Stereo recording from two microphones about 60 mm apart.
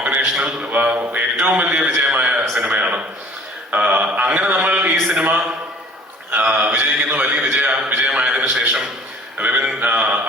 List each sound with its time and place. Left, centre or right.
0.0 s a man's voice: right
2.0 s a sound: centre
2.6 s a man's voice: right